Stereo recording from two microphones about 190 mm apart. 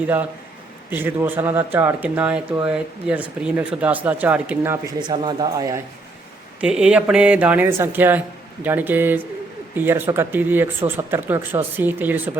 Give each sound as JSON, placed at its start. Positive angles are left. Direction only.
{"t": 0.9, "sound": "speech", "side_deg": -10}
{"t": 4.9, "sound": "speech", "side_deg": -25}
{"t": 6.6, "sound": "speech", "side_deg": -5}